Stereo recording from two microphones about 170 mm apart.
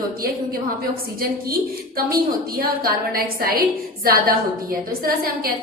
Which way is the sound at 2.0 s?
60° right (ahead or behind).